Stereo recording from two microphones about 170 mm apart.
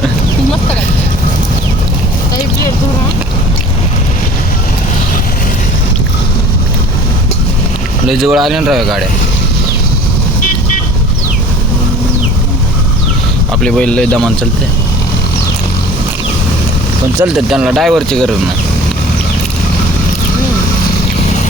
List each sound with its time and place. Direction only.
8.0 s speech: centre (ahead or behind)
13.6 s speech: 5° left (ahead or behind)
17.2 s speech: 5° right (ahead or behind)